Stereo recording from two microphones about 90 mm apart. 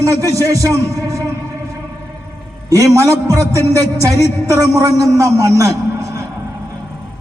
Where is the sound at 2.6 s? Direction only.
35° right (ahead or behind).